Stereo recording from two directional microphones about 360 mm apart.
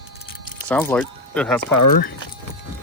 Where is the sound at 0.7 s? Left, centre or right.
Centre.